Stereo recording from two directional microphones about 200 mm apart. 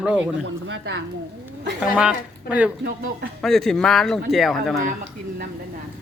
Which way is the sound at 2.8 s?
50° right (ahead or behind).